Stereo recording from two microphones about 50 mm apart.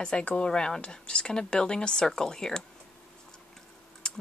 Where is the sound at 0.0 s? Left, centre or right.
Left.